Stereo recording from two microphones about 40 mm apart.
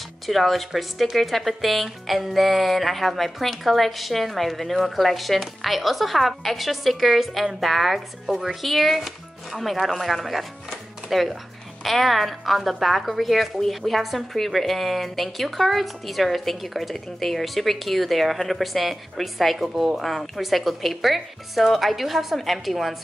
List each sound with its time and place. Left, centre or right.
0.3 s speech: centre